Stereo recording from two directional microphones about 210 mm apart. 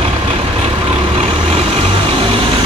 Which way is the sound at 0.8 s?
25° right (ahead or behind).